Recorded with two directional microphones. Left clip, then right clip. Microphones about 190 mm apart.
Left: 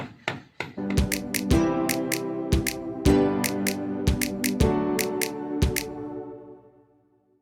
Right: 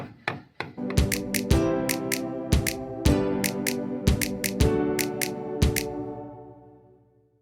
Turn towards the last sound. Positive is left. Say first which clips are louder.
# even
turn(degrees=0)  # may be behind; listen again after turning